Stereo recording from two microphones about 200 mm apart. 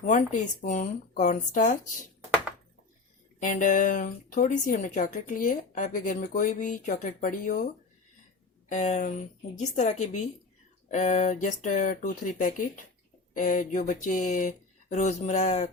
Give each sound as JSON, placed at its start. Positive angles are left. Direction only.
{"t": 0.0, "sound": "speech", "side_deg": 40}
{"t": 3.4, "sound": "speech", "side_deg": 40}
{"t": 8.7, "sound": "speech", "side_deg": 35}